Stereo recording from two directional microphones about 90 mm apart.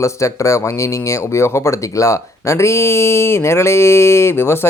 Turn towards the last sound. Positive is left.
turn(degrees=30)  # may be behind; listen again after turning